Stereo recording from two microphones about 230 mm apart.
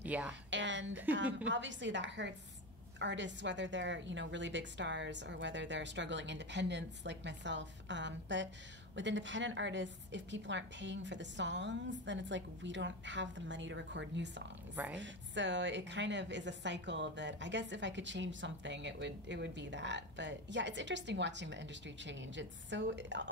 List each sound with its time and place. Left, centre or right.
0.0 s a woman's voice: centre
0.5 s a sound: right
1.1 s a woman's voice: right